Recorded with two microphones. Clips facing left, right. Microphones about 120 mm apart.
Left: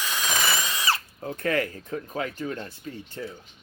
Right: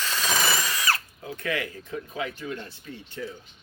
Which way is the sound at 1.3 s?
45° left (ahead or behind).